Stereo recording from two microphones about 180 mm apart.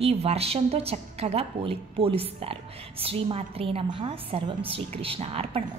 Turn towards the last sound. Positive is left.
turn(degrees=-35)  # may be behind; listen again after turning